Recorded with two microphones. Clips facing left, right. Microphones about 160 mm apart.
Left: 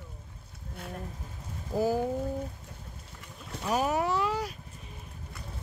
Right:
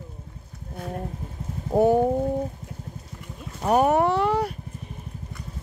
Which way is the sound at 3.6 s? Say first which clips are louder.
Right 9 dB; 60° right (ahead or behind).